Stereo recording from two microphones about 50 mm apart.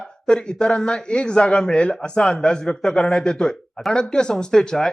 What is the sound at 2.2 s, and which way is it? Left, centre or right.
A man's voice, centre.